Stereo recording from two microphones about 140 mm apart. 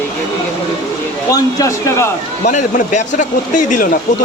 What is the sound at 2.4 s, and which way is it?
Speech, 55° left (ahead or behind).